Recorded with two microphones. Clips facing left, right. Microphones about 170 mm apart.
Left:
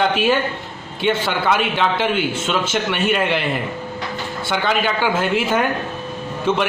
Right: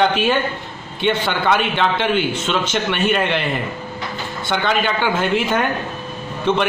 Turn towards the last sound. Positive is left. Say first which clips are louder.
# right 1 dB
turn(degrees=5)  # may be behind; listen again after turning